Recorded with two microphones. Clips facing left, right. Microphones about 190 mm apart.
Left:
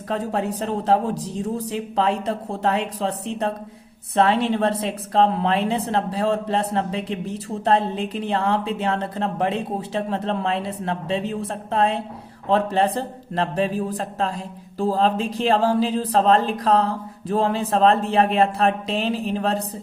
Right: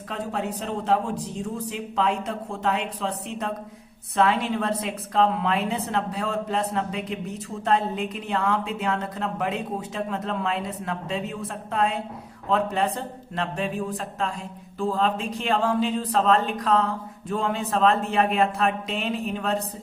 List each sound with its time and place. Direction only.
0.1 s a woman's voice: 35° left (ahead or behind)